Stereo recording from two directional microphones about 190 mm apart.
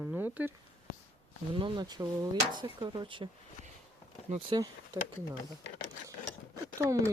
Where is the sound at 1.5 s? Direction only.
25° right (ahead or behind).